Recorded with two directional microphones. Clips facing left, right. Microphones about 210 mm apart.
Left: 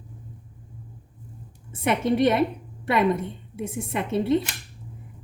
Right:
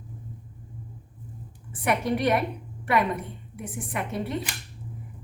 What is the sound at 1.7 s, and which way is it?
A woman's voice, 25° left (ahead or behind).